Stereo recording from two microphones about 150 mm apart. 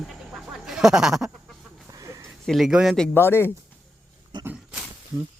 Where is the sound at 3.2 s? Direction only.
15° left (ahead or behind).